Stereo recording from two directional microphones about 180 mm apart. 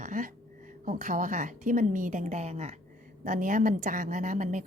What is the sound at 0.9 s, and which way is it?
A woman's voice, 45° right (ahead or behind).